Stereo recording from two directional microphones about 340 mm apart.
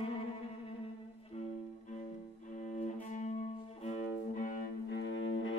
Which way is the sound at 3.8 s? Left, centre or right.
Centre.